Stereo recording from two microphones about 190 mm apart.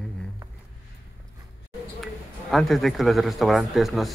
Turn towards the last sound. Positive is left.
turn(degrees=0)  # may be behind; listen again after turning